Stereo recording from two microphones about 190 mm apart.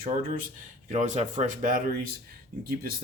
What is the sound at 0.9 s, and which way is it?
Speech, 40° right (ahead or behind).